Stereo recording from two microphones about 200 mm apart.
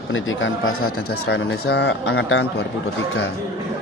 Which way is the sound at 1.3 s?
60° left (ahead or behind).